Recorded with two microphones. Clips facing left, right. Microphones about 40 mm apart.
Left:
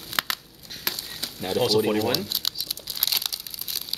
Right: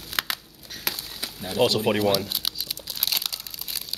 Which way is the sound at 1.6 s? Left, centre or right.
Right.